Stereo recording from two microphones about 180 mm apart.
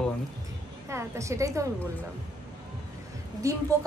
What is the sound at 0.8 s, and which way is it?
Speech, 15° right (ahead or behind).